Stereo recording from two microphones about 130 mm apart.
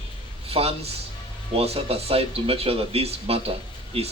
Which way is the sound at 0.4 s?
50° right (ahead or behind).